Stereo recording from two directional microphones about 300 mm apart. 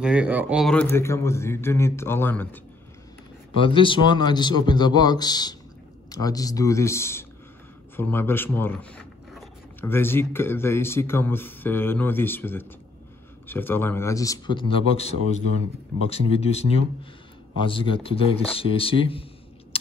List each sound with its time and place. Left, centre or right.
0.0 s a man's voice: centre
3.5 s a man's voice: centre